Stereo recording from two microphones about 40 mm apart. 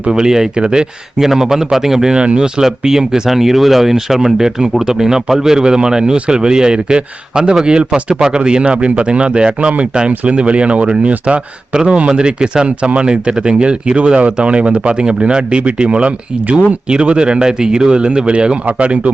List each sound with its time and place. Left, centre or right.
0.1 s speech: centre
1.2 s speech: centre
2.1 s speech: right
2.6 s speech: centre; by 16.7 s right
16.9 s speech: right